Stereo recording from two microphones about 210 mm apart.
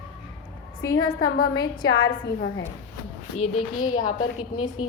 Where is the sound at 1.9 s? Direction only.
70° left (ahead or behind).